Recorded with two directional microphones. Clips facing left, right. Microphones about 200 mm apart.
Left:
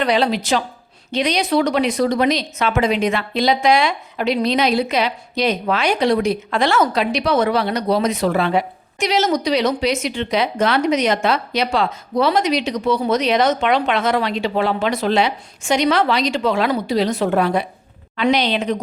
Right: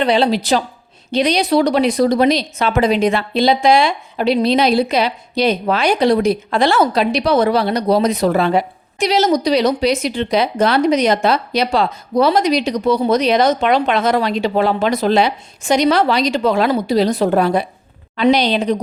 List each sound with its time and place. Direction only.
0.0 s a woman's voice: 30° right (ahead or behind)